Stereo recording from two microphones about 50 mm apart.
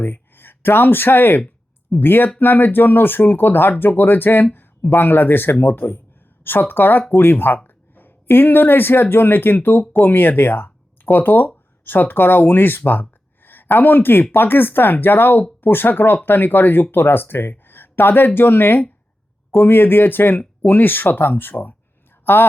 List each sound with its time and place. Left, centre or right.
0.0 s speech: left